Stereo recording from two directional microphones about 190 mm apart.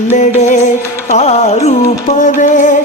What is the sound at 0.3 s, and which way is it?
Music, 35° left (ahead or behind).